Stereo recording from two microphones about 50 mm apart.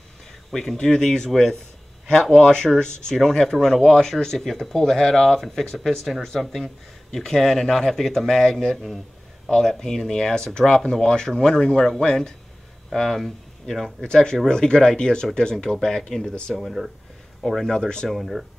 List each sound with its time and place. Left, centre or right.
0.5 s speech: centre
2.3 s speech: centre
14.0 s speech: centre
16.5 s speech: centre
17.7 s speech: centre
18.1 s speech: centre